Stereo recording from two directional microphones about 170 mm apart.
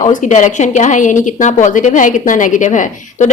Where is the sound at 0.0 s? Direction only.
45° left (ahead or behind).